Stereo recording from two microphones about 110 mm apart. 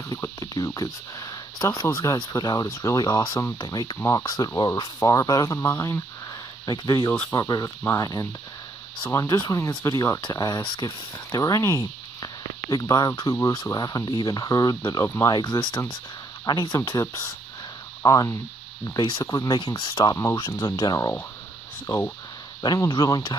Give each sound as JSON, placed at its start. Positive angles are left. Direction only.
{"t": 0.7, "sound": "speech", "side_deg": 35}
{"t": 6.6, "sound": "speech", "side_deg": 40}
{"t": 22.8, "sound": "speech", "side_deg": 35}